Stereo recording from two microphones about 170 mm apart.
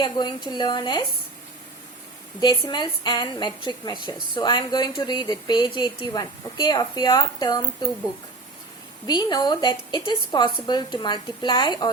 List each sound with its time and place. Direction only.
0.0 s a woman's voice: 25° left (ahead or behind)
2.4 s a woman's voice: 25° left (ahead or behind)
9.0 s a woman's voice: 25° left (ahead or behind)